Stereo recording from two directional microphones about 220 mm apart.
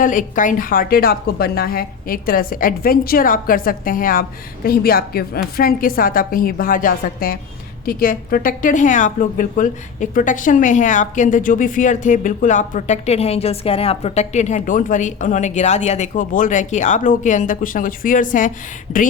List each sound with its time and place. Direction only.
0.0 s a woman's voice: 35° left (ahead or behind)